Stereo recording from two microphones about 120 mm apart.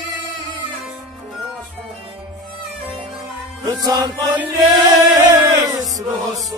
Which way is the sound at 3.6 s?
30° right (ahead or behind).